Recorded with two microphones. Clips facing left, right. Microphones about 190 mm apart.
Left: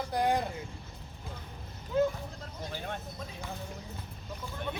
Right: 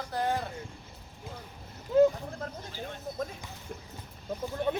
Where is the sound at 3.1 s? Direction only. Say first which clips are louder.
Right 9 dB; 50° right (ahead or behind).